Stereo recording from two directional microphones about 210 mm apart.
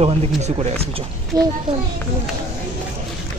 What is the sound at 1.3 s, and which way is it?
Speech, 15° right (ahead or behind).